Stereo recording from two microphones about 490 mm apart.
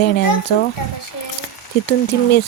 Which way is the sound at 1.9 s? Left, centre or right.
Left.